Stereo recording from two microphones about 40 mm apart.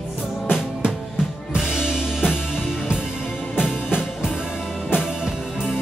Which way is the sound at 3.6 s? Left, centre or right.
Right.